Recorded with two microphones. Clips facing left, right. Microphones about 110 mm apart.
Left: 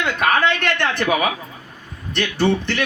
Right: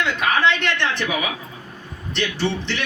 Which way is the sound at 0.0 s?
50° left (ahead or behind).